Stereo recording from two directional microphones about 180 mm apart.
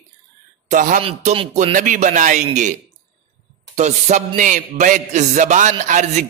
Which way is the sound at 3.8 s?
40° right (ahead or behind).